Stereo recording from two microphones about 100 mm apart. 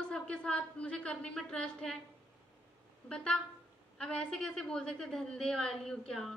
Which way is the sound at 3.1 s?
10° left (ahead or behind).